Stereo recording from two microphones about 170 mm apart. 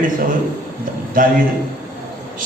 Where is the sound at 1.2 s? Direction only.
55° right (ahead or behind).